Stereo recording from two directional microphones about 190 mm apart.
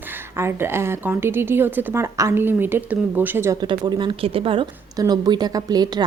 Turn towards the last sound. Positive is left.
turn(degrees=-20)  # may be behind; listen again after turning